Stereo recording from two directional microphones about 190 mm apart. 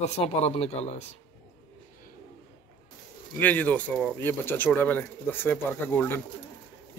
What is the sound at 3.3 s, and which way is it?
Speech, 10° left (ahead or behind).